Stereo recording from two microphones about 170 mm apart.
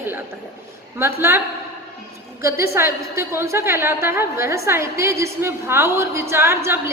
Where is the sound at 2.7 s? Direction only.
15° right (ahead or behind).